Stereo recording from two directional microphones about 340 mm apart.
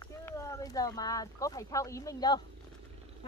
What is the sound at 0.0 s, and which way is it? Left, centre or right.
Speech, centre.